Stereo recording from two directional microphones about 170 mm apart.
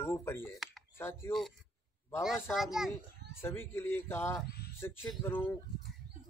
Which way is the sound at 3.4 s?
15° left (ahead or behind).